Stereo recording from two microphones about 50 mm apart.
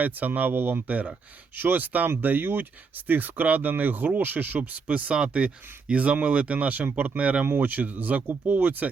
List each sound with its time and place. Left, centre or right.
0.0 s speech: right
1.5 s speech: right
7.4 s speech: right
7.7 s speech: right